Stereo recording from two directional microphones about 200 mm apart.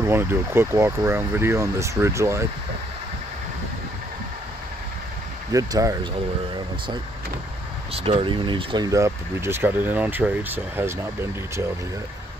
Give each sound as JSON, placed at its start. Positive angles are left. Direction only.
{"t": 0.0, "sound": "speech", "side_deg": -10}
{"t": 5.5, "sound": "speech", "side_deg": -15}
{"t": 7.9, "sound": "speech", "side_deg": -30}